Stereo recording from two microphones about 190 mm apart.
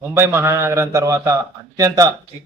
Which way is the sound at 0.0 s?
10° right (ahead or behind).